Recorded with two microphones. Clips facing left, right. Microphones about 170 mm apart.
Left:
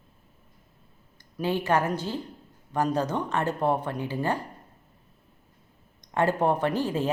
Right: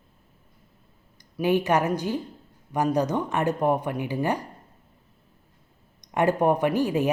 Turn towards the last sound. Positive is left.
turn(degrees=-15)  # may be behind; listen again after turning